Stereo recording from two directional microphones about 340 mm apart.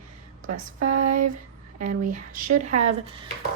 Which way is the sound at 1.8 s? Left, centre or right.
Right.